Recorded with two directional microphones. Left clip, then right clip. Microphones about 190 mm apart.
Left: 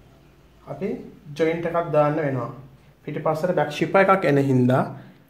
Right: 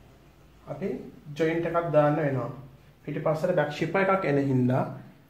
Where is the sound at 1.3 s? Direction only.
35° left (ahead or behind).